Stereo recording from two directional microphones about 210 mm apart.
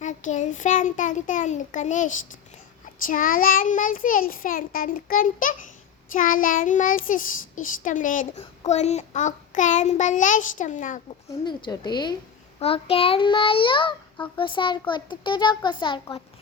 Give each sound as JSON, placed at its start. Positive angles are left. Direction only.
{"t": 0.0, "sound": "child singing", "side_deg": 35}
{"t": 11.3, "sound": "a child's voice", "side_deg": 20}